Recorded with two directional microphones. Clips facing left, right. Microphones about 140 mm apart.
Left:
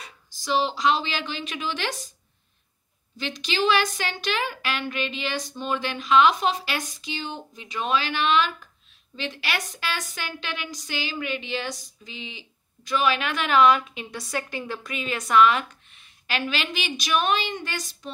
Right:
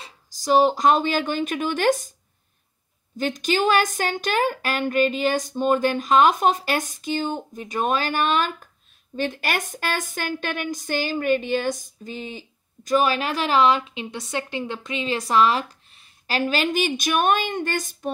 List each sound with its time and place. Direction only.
0.0 s a woman's voice: 40° right (ahead or behind)
3.2 s a woman's voice: 45° right (ahead or behind)